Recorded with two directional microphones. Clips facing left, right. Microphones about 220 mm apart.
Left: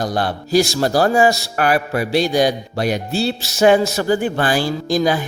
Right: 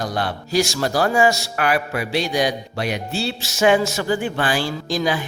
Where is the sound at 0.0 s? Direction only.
35° left (ahead or behind).